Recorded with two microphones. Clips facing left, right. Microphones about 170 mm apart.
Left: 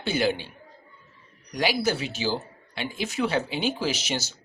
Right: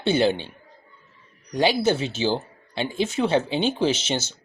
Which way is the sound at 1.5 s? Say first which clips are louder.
Right 5 dB; 25° right (ahead or behind).